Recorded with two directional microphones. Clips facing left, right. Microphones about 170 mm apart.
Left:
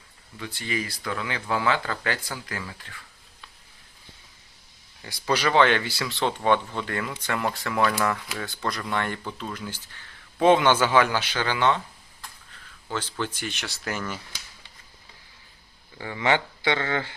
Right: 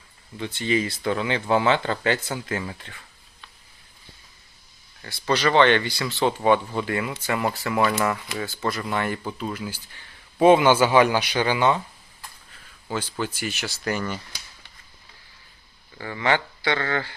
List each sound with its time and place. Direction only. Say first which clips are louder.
0.3 s speech: right 7 dB; 25° right (ahead or behind)
5.0 s speech: right 2 dB; 10° left (ahead or behind); by 11.8 s 10° right (ahead or behind)
12.9 s speech: right 2 dB; 10° right (ahead or behind)
16.0 s speech: even; 15° left (ahead or behind)